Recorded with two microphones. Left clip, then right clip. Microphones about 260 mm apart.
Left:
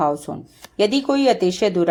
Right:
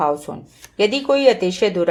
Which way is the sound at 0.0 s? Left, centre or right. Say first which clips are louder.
Right 1 dB; left.